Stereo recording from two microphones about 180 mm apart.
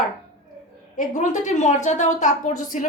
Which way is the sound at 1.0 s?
45° left (ahead or behind).